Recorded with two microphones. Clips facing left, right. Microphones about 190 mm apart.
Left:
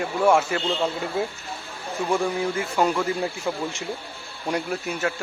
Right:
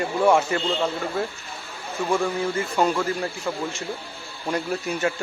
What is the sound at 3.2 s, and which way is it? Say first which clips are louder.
Speech: left 1 dB; 15° left (ahead or behind).